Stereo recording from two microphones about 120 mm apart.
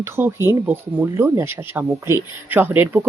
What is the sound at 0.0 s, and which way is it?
Speech, 20° right (ahead or behind).